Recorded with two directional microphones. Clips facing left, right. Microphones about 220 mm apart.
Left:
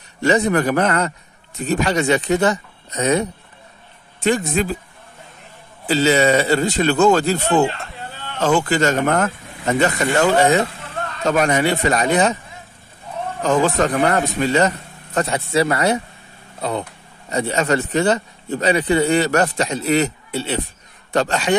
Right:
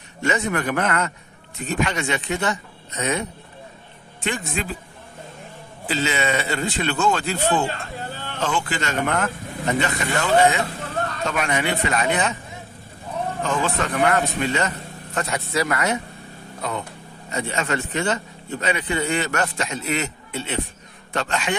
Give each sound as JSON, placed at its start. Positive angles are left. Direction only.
{"t": 0.2, "sound": "a man's voice", "side_deg": 35}
{"t": 5.9, "sound": "a man's voice", "side_deg": 40}
{"t": 13.4, "sound": "a man's voice", "side_deg": 40}